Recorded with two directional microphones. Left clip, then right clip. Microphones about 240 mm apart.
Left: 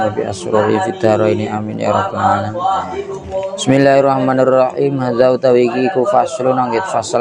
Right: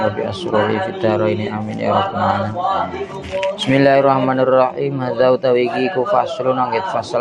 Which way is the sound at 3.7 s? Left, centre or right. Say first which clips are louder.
Left 2 dB; left.